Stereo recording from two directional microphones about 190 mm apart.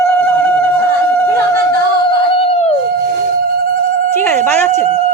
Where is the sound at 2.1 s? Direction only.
30° left (ahead or behind).